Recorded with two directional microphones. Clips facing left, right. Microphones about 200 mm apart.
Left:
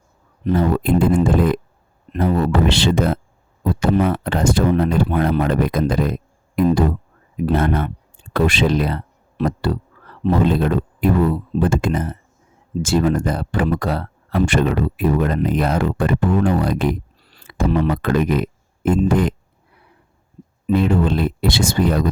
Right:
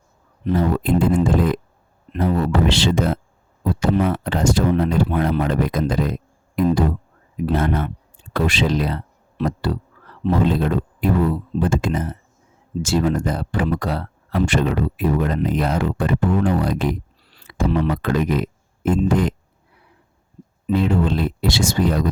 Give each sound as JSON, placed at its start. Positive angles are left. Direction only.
{"t": 0.4, "sound": "speech", "side_deg": 55}
{"t": 7.4, "sound": "speech", "side_deg": 55}
{"t": 20.7, "sound": "speech", "side_deg": 55}